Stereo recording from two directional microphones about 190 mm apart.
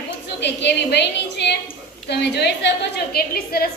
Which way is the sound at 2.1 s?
60° left (ahead or behind).